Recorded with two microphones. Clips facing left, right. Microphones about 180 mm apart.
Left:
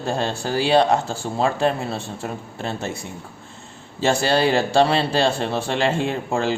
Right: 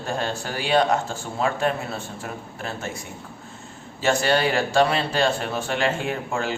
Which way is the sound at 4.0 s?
30° left (ahead or behind).